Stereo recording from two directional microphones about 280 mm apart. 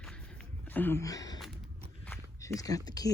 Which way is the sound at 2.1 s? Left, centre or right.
Centre.